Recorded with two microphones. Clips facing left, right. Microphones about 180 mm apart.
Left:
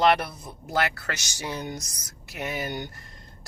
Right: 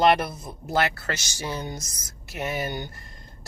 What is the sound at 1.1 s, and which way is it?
Speech, 15° left (ahead or behind).